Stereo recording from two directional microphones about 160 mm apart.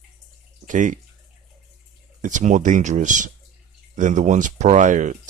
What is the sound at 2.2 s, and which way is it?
Speech, 50° right (ahead or behind).